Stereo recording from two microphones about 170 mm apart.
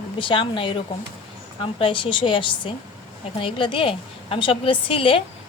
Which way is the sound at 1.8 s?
30° left (ahead or behind).